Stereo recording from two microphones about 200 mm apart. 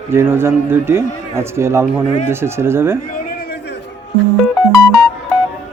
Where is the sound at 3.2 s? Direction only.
55° left (ahead or behind).